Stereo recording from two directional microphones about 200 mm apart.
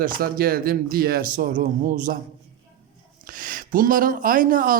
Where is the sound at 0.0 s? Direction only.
45° right (ahead or behind).